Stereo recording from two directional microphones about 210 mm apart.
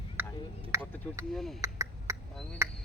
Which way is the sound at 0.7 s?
15° right (ahead or behind).